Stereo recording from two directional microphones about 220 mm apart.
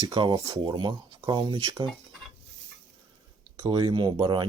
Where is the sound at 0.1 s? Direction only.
20° right (ahead or behind).